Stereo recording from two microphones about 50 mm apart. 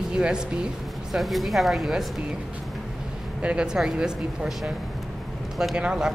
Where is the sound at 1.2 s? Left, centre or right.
Centre.